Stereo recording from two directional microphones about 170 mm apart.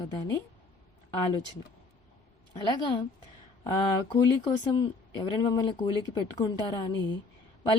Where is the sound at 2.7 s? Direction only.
25° left (ahead or behind).